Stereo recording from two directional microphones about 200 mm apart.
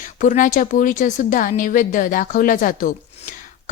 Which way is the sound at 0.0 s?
40° left (ahead or behind).